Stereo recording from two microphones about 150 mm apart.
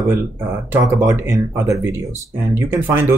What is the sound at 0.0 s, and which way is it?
Speech, 25° right (ahead or behind).